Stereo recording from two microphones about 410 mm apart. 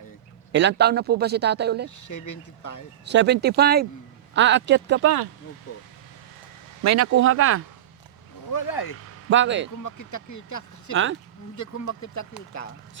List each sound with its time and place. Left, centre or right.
0.5 s a man's voice: right
2.0 s speech: left
3.1 s a man's voice: right
5.7 s speech: left
6.8 s speech: right
8.5 s speech: left
9.3 s a man's voice: right
9.8 s speech: left
10.9 s a man's voice: right
11.5 s speech: left